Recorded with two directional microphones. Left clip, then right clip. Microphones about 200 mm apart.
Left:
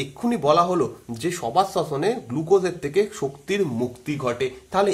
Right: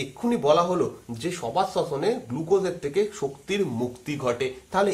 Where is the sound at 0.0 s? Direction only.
25° left (ahead or behind).